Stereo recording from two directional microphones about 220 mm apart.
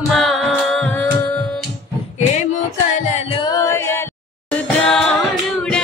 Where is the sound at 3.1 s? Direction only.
25° left (ahead or behind); by 5.0 s centre (ahead or behind).